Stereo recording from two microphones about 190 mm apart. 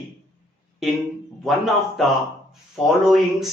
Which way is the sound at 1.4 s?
Centre (ahead or behind).